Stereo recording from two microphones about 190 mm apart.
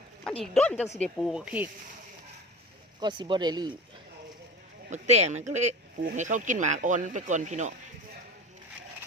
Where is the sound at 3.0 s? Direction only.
25° right (ahead or behind).